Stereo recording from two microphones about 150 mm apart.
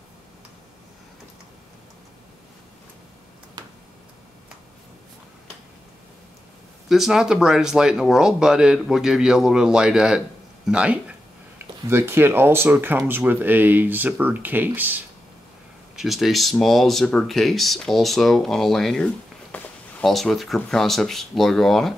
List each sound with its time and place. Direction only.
3.6 s a sound: 30° right (ahead or behind)
6.9 s speech: centre (ahead or behind)
16.0 s speech: centre (ahead or behind)